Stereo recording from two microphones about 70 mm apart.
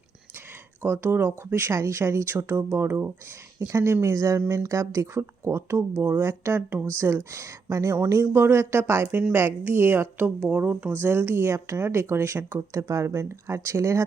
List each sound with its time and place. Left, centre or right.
0.8 s speech: right
8.2 s a woman's voice: right